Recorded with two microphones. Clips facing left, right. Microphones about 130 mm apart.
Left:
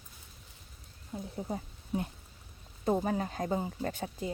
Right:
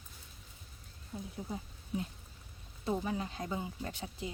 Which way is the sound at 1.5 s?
50° left (ahead or behind).